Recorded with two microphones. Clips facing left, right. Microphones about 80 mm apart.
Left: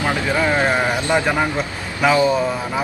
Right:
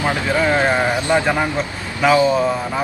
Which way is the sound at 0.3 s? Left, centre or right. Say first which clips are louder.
Right 2 dB; right.